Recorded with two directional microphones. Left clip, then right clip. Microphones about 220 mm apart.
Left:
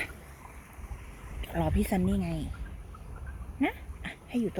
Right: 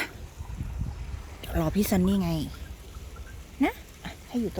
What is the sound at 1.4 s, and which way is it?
Speech, 20° right (ahead or behind).